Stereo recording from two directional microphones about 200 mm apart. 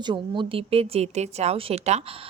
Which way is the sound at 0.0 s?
25° right (ahead or behind).